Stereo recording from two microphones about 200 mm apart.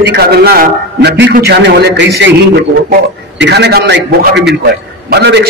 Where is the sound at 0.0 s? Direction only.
50° right (ahead or behind).